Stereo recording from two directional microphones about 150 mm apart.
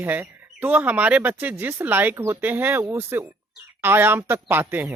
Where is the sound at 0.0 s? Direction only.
10° right (ahead or behind).